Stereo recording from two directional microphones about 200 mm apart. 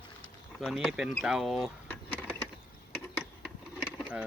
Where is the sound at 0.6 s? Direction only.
Centre (ahead or behind).